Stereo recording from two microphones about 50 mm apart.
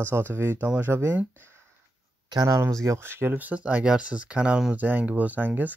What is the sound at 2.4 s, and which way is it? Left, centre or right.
Speech, right.